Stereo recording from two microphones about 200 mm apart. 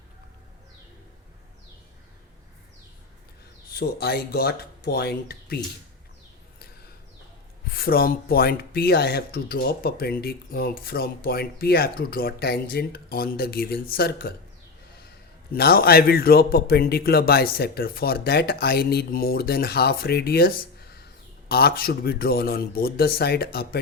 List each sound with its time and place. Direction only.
3.7 s speech: 50° left (ahead or behind)
7.7 s speech: 50° left (ahead or behind)
15.5 s speech: 50° left (ahead or behind)